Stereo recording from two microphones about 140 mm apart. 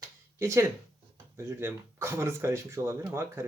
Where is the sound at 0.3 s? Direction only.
20° right (ahead or behind).